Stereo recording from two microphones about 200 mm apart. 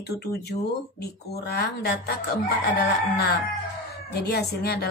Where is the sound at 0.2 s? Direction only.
55° left (ahead or behind).